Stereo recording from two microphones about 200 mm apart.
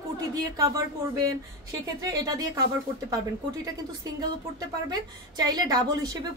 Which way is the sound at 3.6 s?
20° right (ahead or behind).